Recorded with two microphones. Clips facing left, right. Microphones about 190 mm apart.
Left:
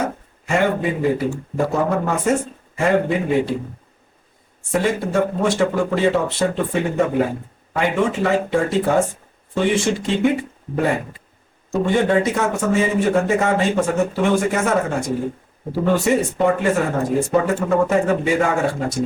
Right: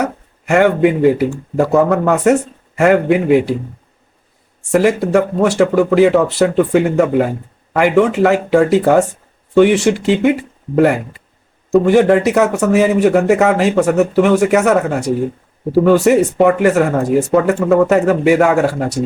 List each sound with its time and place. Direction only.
0.0 s a sound: 75° right (ahead or behind)
1.5 s speech: 70° right (ahead or behind)
4.7 s speech: 75° right (ahead or behind)
11.7 s speech: 75° right (ahead or behind)